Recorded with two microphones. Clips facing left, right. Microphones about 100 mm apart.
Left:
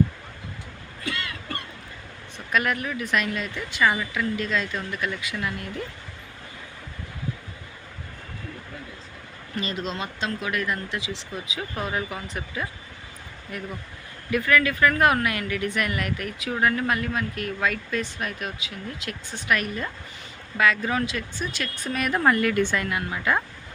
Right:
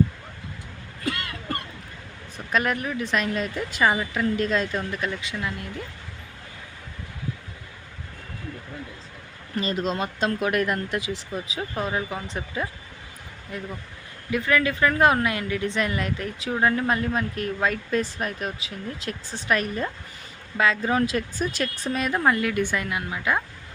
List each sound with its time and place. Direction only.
2.5 s speech: 35° right (ahead or behind)
9.6 s speech: 40° right (ahead or behind)
11.7 s a woman's voice: 25° right (ahead or behind); by 21.7 s 40° right (ahead or behind)
21.8 s a woman's voice: 25° right (ahead or behind)